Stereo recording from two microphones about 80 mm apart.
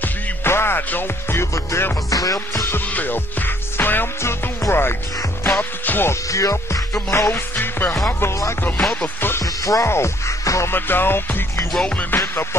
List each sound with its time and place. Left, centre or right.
0.0 s music: left
2.0 s music: left
2.7 s music: left
6.2 s music: left
7.5 s music: left
9.4 s music: left
10.7 s music: left